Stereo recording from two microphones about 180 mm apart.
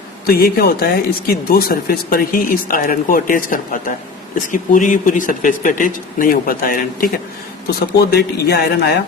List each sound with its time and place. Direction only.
0.3 s a man's voice: 55° left (ahead or behind)
8.1 s a man's voice: 65° left (ahead or behind)